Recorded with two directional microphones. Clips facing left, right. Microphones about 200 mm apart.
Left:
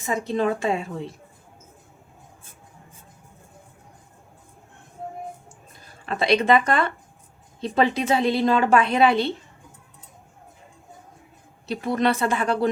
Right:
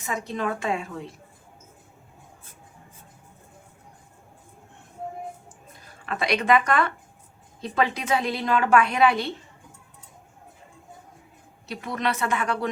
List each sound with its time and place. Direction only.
0.0 s a woman's voice: 25° left (ahead or behind)
6.1 s a woman's voice: 25° left (ahead or behind)
11.7 s speech: 30° left (ahead or behind)